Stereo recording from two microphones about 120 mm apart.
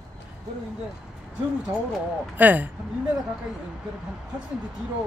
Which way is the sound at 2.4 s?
15° right (ahead or behind).